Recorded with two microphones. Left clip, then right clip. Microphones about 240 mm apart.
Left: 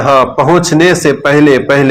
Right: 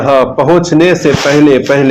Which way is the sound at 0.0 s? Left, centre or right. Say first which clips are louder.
Even; left.